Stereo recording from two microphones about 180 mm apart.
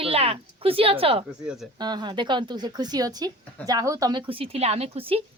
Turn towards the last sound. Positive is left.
turn(degrees=-30)  # may be behind; listen again after turning